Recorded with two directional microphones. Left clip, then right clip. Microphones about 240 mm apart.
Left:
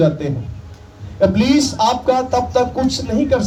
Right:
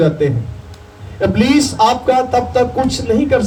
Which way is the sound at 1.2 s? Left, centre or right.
Left.